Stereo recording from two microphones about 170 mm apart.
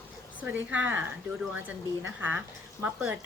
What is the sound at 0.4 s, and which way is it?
Speech, 10° right (ahead or behind).